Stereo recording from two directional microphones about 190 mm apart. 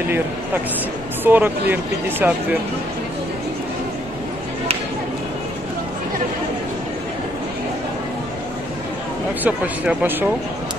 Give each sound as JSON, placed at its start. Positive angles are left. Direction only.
{"t": 1.2, "sound": "speech", "side_deg": -10}
{"t": 9.4, "sound": "speech", "side_deg": -10}